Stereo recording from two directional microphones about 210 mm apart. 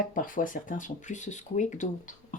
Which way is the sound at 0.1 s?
40° left (ahead or behind).